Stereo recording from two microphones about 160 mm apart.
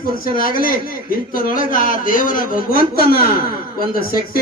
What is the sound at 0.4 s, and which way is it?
A man's voice, 60° left (ahead or behind).